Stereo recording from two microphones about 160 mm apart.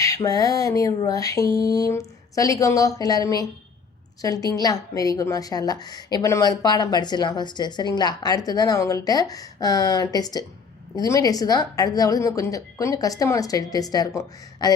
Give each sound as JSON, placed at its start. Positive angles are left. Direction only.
{"t": 0.0, "sound": "a woman's voice", "side_deg": 20}